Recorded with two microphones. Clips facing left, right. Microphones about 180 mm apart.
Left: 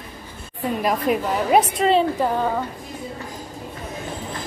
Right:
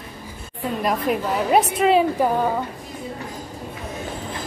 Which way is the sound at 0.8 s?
Centre (ahead or behind).